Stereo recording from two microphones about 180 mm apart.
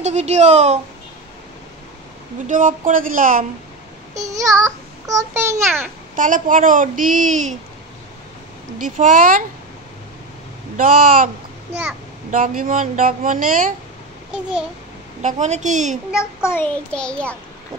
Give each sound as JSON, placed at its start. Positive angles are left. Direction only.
{"t": 0.0, "sound": "a woman's voice", "side_deg": -40}
{"t": 2.4, "sound": "a woman's voice", "side_deg": -50}
{"t": 4.3, "sound": "a child's voice", "side_deg": -20}
{"t": 6.1, "sound": "a woman's voice", "side_deg": -45}
{"t": 8.8, "sound": "a woman's voice", "side_deg": -45}
{"t": 10.8, "sound": "a woman's voice", "side_deg": -45}
{"t": 12.3, "sound": "a woman's voice", "side_deg": -50}
{"t": 14.3, "sound": "a child's voice", "side_deg": -5}
{"t": 15.2, "sound": "a woman's voice", "side_deg": -40}
{"t": 16.1, "sound": "a child's voice", "side_deg": -5}
{"t": 16.4, "sound": "child singing", "side_deg": 10}